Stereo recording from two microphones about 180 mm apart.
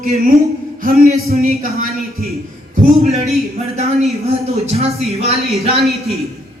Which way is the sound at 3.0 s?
35° right (ahead or behind).